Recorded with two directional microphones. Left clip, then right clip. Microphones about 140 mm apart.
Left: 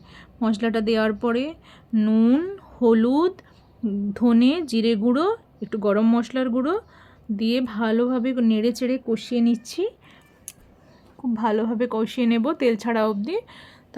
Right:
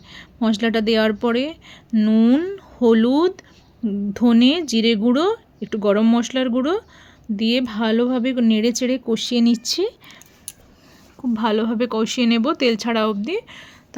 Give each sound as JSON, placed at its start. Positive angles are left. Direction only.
{"t": 0.1, "sound": "a woman's voice", "side_deg": -35}
{"t": 11.3, "sound": "speech", "side_deg": -30}